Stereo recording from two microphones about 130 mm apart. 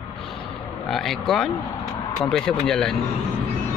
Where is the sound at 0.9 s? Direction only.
Centre (ahead or behind).